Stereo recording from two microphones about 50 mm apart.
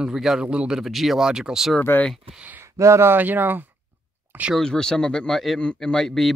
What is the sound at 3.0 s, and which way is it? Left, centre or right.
Speech, right.